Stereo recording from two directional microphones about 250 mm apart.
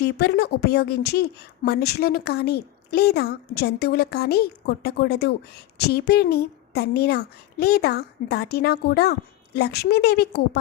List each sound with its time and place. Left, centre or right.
0.2 s a woman's voice: left